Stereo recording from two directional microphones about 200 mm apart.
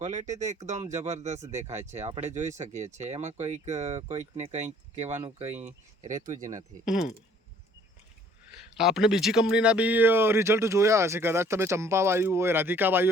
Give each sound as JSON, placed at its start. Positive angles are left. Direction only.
{"t": 0.0, "sound": "speech", "side_deg": -35}
{"t": 6.4, "sound": "speech", "side_deg": -15}
{"t": 8.8, "sound": "speech", "side_deg": 0}